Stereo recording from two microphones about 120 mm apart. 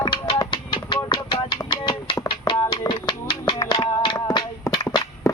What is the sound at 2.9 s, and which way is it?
Finger snapping, 40° left (ahead or behind).